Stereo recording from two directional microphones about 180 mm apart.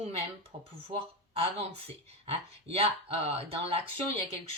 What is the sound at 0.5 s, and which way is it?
Speech, 35° right (ahead or behind).